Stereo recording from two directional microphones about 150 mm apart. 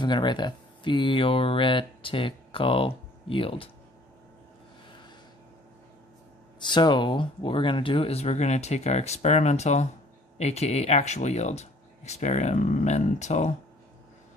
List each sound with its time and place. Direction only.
0.0 s speech: 30° left (ahead or behind)
6.7 s speech: 30° left (ahead or behind); by 13.6 s 50° left (ahead or behind)